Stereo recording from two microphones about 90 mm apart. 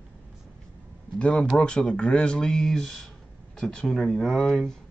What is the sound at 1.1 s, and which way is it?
Speech, 10° left (ahead or behind).